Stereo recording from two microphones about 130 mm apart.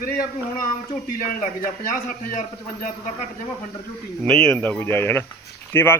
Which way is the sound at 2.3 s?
90° left.